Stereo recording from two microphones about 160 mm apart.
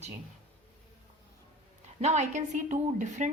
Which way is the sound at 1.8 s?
45° right (ahead or behind).